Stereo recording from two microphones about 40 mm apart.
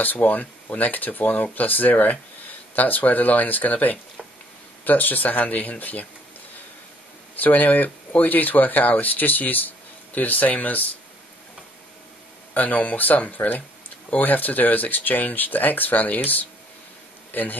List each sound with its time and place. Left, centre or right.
0.0 s speech: left
7.3 s speech: left
12.5 s speech: left